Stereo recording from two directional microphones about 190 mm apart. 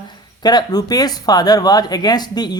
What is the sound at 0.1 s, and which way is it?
Speech, 20° left (ahead or behind).